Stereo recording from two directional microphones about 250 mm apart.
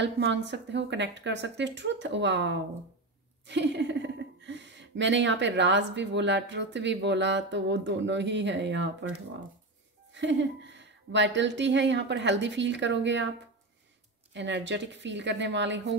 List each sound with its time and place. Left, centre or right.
0.0 s speech: right
10.1 s speech: right
14.3 s speech: right